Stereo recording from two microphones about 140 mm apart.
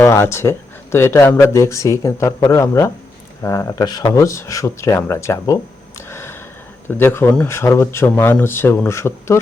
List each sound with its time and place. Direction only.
0.0 s speech: 20° left (ahead or behind)
6.1 s a sound: 15° left (ahead or behind)
6.9 s speech: 15° left (ahead or behind)